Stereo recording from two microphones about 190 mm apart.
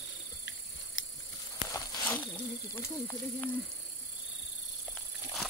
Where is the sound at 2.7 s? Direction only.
10° left (ahead or behind).